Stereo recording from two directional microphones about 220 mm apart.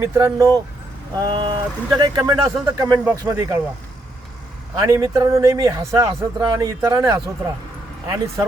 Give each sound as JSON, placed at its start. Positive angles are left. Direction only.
{"t": 0.0, "sound": "a man's voice", "side_deg": -15}
{"t": 4.8, "sound": "a man's voice", "side_deg": -15}